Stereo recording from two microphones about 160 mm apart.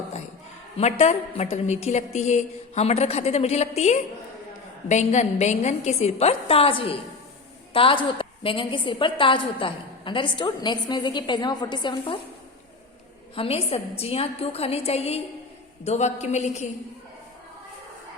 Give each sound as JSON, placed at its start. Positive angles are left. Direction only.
{"t": 0.8, "sound": "a woman's voice", "side_deg": 40}
{"t": 13.3, "sound": "a woman's voice", "side_deg": 35}